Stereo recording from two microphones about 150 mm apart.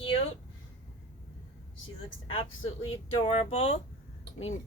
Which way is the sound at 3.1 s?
45° left (ahead or behind).